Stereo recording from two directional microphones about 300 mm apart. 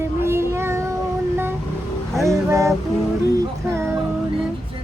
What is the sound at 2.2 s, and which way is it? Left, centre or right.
Speech, centre.